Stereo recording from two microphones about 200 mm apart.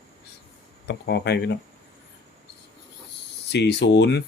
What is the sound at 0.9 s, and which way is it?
Speech, 55° left (ahead or behind).